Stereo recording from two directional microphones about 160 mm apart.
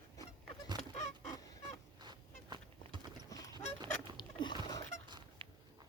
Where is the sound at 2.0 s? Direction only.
30° right (ahead or behind).